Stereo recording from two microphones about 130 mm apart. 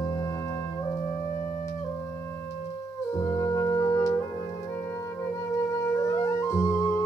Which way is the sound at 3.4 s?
30° left (ahead or behind).